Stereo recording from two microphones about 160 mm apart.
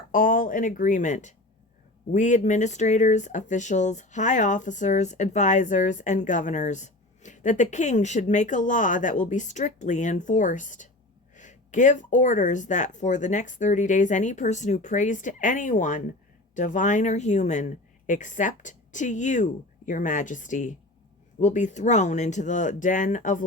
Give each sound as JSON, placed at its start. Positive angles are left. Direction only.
{"t": 0.1, "sound": "speech", "side_deg": 55}